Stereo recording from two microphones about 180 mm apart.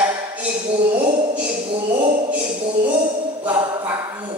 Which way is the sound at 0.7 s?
30° right (ahead or behind).